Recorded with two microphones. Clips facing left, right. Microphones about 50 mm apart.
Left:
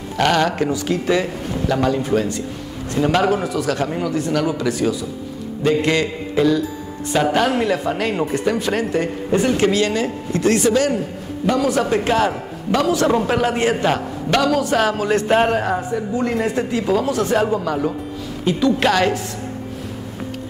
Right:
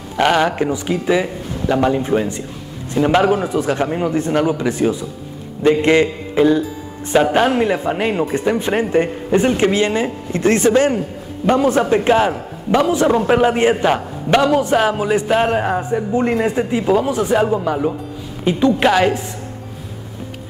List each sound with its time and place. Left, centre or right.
0.2 s a man's voice: centre
11.9 s a man's voice: centre
15.2 s a man's voice: centre
15.5 s a man's voice: centre
15.8 s a man's voice: right